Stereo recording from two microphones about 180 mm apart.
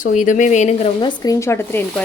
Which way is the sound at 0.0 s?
45° left (ahead or behind).